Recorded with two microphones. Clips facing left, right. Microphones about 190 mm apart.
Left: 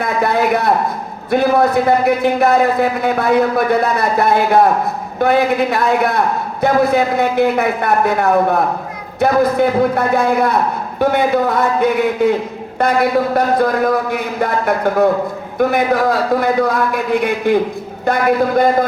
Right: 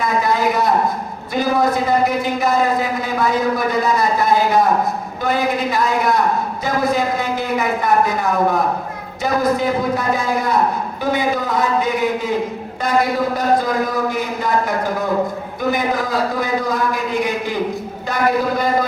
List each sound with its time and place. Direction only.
0.0 s a man's voice: 60° left (ahead or behind)
15.5 s a man's voice: 60° left (ahead or behind)